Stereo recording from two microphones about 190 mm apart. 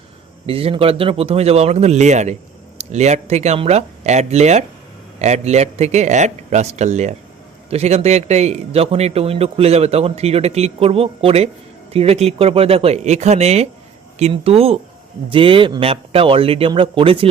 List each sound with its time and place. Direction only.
0.4 s a man's voice: 30° right (ahead or behind)